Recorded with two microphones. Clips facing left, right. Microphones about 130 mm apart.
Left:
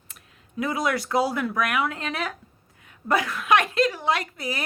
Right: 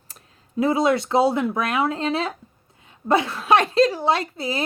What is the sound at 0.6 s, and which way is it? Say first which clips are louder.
Speech: right 6 dB; 25° right (ahead or behind).